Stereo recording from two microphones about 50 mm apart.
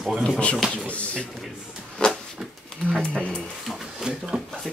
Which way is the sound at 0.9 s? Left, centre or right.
Left.